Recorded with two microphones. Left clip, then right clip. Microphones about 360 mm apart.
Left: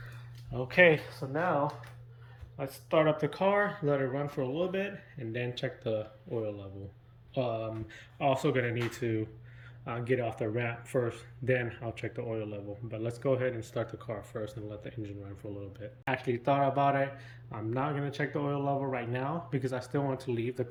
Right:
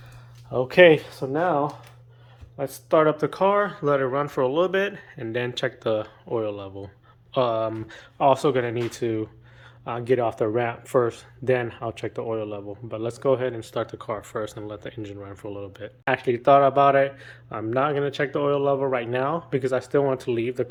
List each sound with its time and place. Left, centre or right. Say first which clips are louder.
0.7 s speech: right 8 dB; centre